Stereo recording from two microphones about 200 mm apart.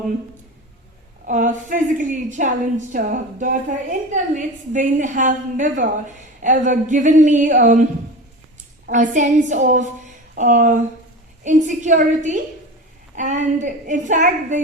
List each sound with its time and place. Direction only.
1.3 s a woman's voice: 40° right (ahead or behind)
8.9 s a woman's voice: 40° right (ahead or behind)